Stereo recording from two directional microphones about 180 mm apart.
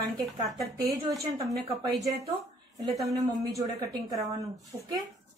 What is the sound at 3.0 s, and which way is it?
Speech, 20° right (ahead or behind).